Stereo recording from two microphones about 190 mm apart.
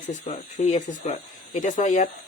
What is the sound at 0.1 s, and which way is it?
Speech, 35° left (ahead or behind).